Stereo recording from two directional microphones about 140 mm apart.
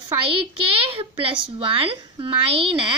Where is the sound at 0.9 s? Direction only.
40° right (ahead or behind).